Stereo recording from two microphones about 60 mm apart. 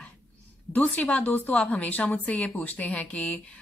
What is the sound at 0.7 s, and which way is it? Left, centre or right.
Speech, left.